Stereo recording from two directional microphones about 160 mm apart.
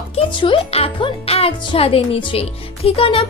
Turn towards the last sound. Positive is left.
turn(degrees=35)  # may be behind; listen again after turning